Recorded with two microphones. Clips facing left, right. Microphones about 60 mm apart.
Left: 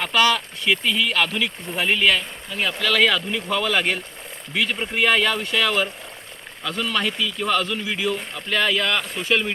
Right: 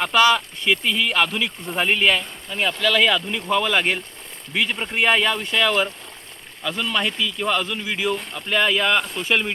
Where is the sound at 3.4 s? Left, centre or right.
Centre.